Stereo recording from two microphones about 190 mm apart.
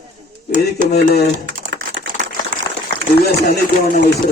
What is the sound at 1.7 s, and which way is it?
Typing, 65° right (ahead or behind).